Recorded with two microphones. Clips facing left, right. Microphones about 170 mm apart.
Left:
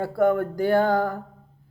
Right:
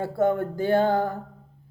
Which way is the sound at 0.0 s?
20° right (ahead or behind).